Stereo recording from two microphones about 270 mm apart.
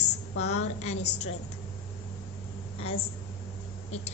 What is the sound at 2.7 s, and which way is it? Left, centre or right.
Speech, left.